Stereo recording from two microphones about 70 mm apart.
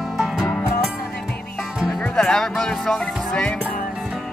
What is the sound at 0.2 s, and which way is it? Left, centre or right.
Music, centre.